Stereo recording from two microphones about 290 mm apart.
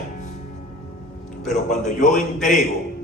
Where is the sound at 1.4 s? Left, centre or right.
Left.